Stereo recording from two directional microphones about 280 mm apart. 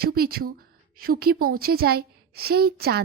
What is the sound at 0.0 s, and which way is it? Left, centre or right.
A woman's voice, right.